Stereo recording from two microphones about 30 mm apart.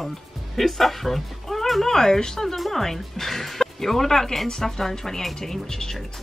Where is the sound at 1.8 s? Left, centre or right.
Centre.